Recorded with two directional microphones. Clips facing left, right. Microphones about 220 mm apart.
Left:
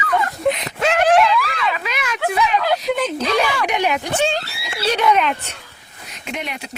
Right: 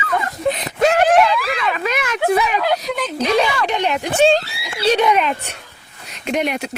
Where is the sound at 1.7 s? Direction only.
50° right (ahead or behind).